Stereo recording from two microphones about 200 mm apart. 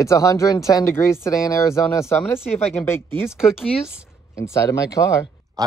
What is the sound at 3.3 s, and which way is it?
Speech, 5° right (ahead or behind).